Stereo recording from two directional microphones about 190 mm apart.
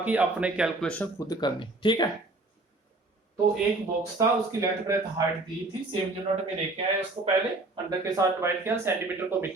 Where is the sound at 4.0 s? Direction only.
15° right (ahead or behind).